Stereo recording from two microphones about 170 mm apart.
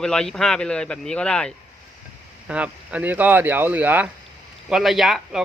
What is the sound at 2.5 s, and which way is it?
Speech, 10° right (ahead or behind).